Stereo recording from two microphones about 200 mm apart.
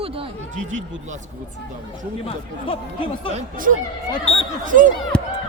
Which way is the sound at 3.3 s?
45° right (ahead or behind).